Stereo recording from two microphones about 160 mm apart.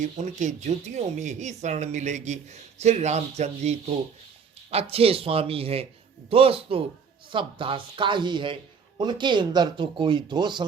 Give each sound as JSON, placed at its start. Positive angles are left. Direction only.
{"t": 0.0, "sound": "speech", "side_deg": -50}